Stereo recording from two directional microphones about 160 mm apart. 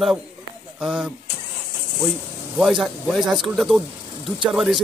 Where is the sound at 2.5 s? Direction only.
5° right (ahead or behind).